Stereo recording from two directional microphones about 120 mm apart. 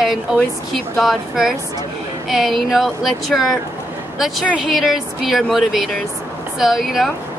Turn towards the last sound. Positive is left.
turn(degrees=0)  # may be behind; listen again after turning